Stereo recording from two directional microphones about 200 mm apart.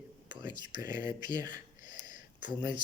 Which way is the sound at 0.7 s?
20° right (ahead or behind).